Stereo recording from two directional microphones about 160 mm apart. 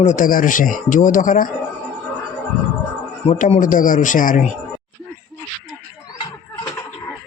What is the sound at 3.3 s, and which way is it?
A man's voice, 45° left (ahead or behind).